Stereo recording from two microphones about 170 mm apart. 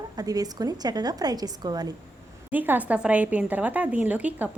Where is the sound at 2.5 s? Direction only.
10° right (ahead or behind).